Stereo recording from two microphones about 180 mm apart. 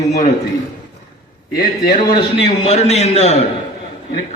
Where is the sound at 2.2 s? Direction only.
35° left (ahead or behind).